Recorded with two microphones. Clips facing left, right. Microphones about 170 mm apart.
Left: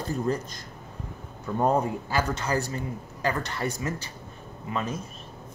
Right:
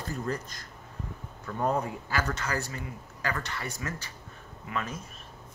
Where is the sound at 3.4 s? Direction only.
40° left (ahead or behind).